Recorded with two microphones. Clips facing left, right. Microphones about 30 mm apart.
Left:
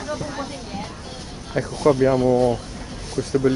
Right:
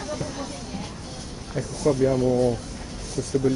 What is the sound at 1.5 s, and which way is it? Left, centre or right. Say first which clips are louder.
Speech: left 5 dB; left.